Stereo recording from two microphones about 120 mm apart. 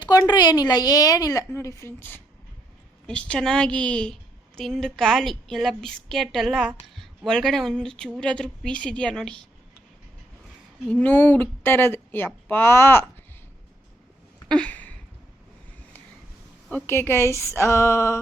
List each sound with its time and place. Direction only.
0.0 s a woman's voice: 35° left (ahead or behind)
3.1 s a woman's voice: 5° left (ahead or behind)
10.8 s speech: 10° left (ahead or behind)
14.4 s a sound: 10° left (ahead or behind)
16.8 s speech: 20° left (ahead or behind)